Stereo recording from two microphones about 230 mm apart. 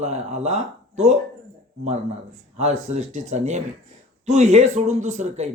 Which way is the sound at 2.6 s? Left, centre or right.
Right.